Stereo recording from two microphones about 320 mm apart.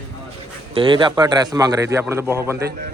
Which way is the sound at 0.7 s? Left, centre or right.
Centre.